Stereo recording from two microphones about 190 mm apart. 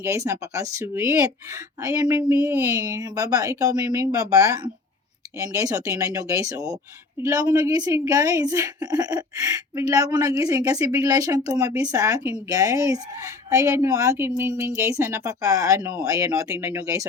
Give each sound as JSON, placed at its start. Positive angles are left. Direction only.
{"t": 0.0, "sound": "a woman's voice", "side_deg": -15}